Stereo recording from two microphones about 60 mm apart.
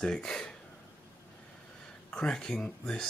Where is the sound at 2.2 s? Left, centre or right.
Centre.